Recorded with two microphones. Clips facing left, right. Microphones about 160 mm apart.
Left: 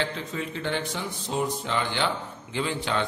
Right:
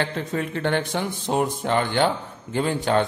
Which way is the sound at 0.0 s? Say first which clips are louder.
Right 4 dB; 55° right (ahead or behind).